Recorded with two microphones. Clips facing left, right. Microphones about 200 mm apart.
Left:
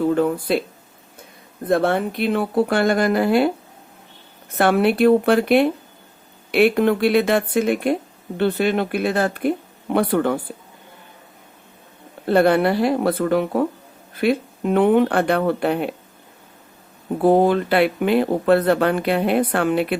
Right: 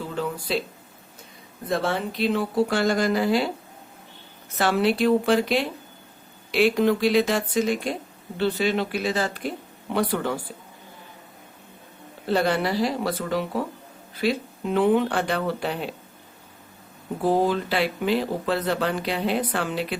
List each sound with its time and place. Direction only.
0.0 s speech: 55° left (ahead or behind)
1.6 s speech: 55° left (ahead or behind)
4.5 s speech: 55° left (ahead or behind)
12.2 s speech: 55° left (ahead or behind)
17.2 s speech: 60° left (ahead or behind)